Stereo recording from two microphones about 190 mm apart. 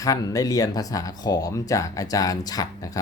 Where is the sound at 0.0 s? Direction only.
20° left (ahead or behind).